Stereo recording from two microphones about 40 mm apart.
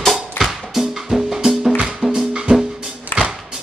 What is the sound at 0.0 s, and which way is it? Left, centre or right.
Music, centre.